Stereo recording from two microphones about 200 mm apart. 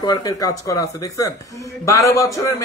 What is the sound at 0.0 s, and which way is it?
A man's voice, 20° left (ahead or behind).